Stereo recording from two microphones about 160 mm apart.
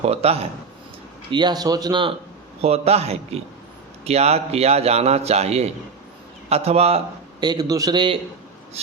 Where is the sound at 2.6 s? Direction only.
40° right (ahead or behind).